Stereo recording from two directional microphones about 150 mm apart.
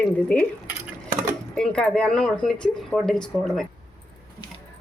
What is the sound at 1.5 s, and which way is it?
Speech, 5° left (ahead or behind).